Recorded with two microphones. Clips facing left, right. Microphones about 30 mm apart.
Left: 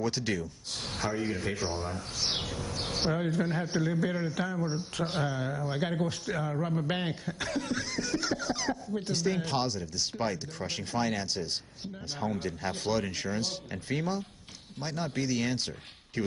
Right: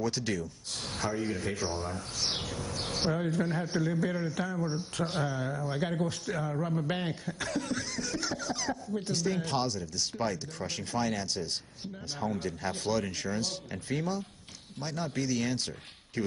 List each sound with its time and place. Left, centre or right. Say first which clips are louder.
0.1 s speech: left 1 dB; centre
5.0 s speech: left 1 dB; centre
11.2 s speech: left 1 dB; centre